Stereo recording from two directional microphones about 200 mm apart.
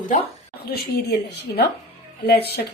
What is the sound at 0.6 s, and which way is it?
A woman's voice, 50° left (ahead or behind).